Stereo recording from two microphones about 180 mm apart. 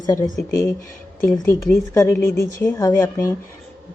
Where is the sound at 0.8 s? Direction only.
50° left (ahead or behind).